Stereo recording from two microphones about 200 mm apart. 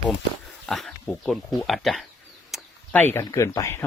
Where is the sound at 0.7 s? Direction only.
Centre (ahead or behind).